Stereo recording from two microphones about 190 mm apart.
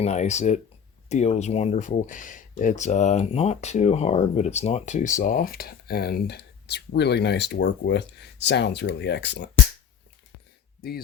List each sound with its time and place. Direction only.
0.0 s speech: 35° left (ahead or behind); by 9.5 s 65° left (ahead or behind)